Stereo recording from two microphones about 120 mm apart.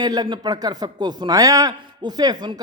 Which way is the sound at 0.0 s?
35° right (ahead or behind).